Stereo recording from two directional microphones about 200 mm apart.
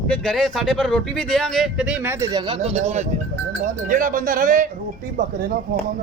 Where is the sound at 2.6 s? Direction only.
30° right (ahead or behind).